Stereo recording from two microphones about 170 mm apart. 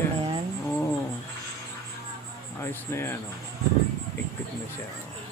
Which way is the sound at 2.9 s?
15° left (ahead or behind).